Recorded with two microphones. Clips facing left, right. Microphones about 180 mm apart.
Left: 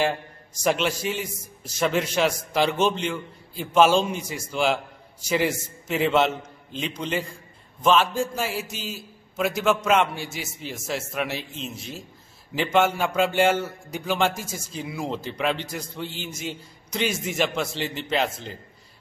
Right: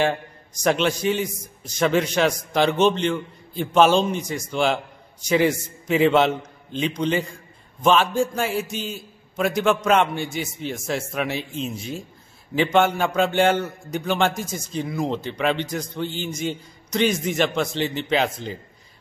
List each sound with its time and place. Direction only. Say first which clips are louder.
0.7 s a man's voice: right 3 dB; 5° left (ahead or behind)